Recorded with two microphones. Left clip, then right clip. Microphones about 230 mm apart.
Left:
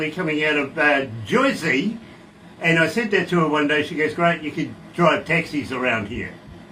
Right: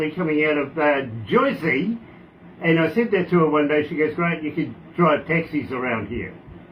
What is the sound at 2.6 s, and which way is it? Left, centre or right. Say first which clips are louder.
A man's voice: left 1 dB; left.